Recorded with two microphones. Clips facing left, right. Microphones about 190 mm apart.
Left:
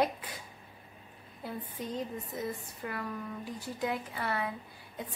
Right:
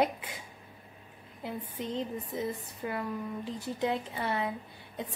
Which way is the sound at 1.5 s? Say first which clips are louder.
Right 2 dB; 25° right (ahead or behind).